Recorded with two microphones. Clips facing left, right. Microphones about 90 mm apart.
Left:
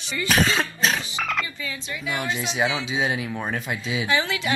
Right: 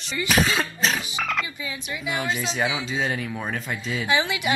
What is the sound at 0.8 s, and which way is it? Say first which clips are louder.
Wild animals: left 1 dB; centre (ahead or behind).